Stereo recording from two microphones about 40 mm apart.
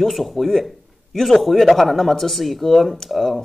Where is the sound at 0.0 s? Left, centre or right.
Centre.